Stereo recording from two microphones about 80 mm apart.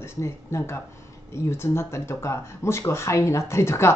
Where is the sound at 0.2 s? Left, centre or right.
Left.